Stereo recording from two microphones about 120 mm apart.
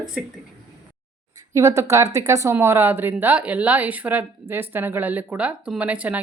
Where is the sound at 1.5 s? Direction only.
25° right (ahead or behind).